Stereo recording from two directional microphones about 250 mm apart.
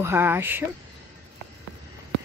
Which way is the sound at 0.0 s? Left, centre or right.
Centre.